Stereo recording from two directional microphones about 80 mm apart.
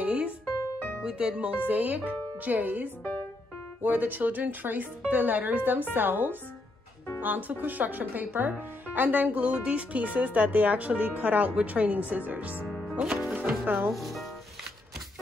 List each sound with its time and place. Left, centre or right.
0.0 s music: centre
0.5 s music: left
1.0 s speech: centre
12.6 s music: centre
12.9 s music: centre
13.8 s speech: centre